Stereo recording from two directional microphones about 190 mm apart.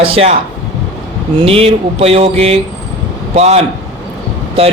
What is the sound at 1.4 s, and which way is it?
Speech, 30° right (ahead or behind).